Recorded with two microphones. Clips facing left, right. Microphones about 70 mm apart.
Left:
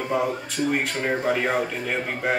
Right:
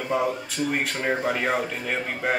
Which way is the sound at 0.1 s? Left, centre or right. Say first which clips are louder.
Even; centre.